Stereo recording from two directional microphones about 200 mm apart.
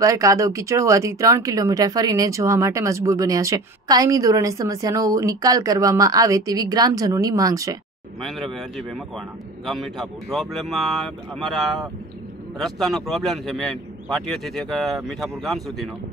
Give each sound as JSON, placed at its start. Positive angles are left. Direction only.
{"t": 0.0, "sound": "speech", "side_deg": -15}
{"t": 8.2, "sound": "a man's voice", "side_deg": 0}